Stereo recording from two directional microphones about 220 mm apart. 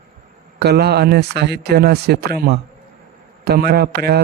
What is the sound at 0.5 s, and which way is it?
A man's voice, 45° right (ahead or behind).